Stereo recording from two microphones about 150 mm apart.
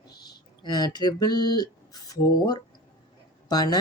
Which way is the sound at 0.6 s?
25° left (ahead or behind).